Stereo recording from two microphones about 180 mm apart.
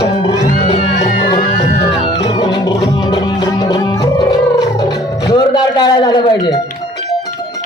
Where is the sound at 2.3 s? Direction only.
20° left (ahead or behind).